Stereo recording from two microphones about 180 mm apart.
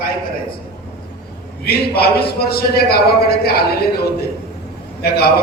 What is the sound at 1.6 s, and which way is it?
A man's voice, 60° left (ahead or behind).